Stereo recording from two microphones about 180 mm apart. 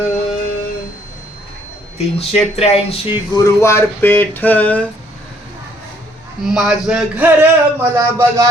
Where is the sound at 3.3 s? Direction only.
20° left (ahead or behind).